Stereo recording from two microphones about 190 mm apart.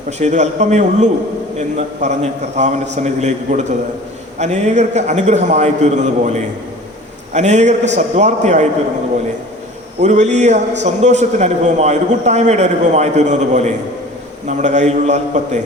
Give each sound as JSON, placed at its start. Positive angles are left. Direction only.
{"t": 0.2, "sound": "a man's voice", "side_deg": -40}
{"t": 10.0, "sound": "a man's voice", "side_deg": -40}